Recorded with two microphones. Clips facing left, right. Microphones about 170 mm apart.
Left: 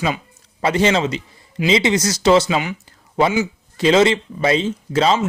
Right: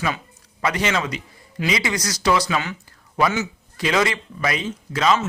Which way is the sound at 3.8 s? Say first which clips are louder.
Left 7 dB; 25° left (ahead or behind).